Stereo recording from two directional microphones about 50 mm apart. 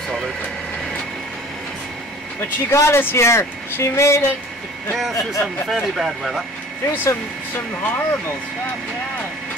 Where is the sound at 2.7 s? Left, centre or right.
Left.